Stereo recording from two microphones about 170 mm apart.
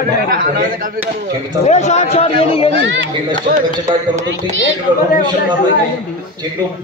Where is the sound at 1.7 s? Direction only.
45° left (ahead or behind).